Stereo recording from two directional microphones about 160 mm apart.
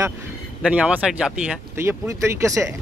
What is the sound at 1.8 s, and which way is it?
Speech, 15° right (ahead or behind).